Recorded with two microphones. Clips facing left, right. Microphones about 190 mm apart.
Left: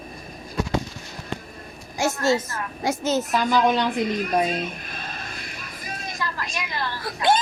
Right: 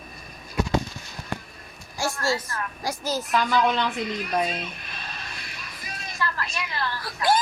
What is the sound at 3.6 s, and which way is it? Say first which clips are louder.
Female singing: left 3 dB; 15° left (ahead or behind).